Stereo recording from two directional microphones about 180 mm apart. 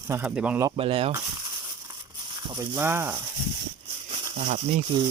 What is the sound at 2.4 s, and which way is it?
Speech, 20° right (ahead or behind).